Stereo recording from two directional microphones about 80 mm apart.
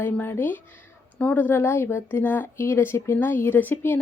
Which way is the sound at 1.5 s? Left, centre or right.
Left.